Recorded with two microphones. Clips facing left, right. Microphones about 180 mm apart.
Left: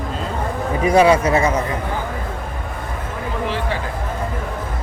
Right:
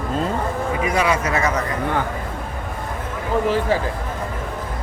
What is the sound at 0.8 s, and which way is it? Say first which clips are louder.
Speech: left 8 dB; 30° left (ahead or behind).